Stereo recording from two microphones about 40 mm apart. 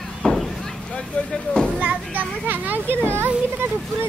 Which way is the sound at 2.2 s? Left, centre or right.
Right.